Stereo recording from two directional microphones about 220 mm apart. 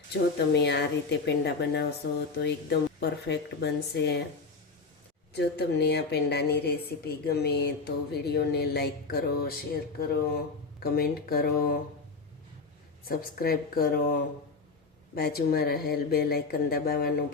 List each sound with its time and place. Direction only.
0.3 s speech: 50° left (ahead or behind)
5.3 s speech: 50° left (ahead or behind)
13.1 s speech: 40° left (ahead or behind)